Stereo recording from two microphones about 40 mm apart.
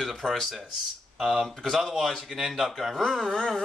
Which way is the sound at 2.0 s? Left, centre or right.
Centre.